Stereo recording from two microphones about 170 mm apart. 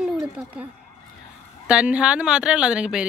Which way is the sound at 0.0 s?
5° right (ahead or behind).